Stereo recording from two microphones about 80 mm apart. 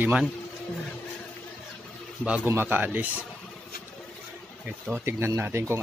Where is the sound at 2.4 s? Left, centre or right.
Right.